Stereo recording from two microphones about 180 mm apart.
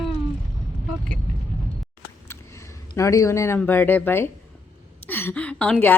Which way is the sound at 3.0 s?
15° left (ahead or behind).